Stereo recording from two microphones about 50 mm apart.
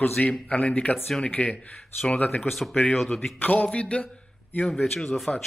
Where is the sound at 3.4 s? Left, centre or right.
Left.